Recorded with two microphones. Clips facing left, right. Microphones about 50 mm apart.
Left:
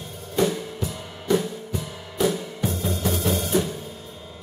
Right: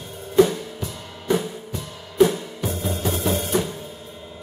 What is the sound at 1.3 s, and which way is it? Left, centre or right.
Music, centre.